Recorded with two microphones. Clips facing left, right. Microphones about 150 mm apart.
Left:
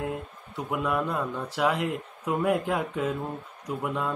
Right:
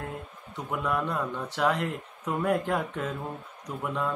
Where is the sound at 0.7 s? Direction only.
5° left (ahead or behind).